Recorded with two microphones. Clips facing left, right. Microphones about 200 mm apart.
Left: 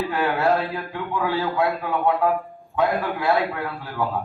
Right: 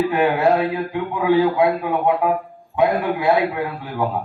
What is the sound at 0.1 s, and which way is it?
A man's voice, 15° right (ahead or behind).